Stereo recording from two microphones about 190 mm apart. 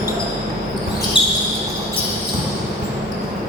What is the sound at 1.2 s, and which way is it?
Basketball bounce, 25° left (ahead or behind).